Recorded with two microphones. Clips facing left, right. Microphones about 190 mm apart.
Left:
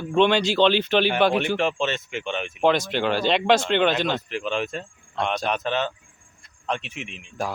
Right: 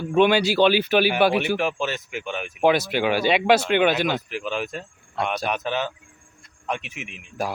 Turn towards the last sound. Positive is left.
turn(degrees=-10)  # may be behind; listen again after turning